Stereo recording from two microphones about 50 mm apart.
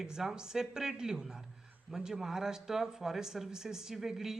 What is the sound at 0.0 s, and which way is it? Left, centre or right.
Speech, centre.